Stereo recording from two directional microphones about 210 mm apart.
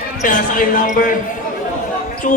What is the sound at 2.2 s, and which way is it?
Speech, 40° left (ahead or behind).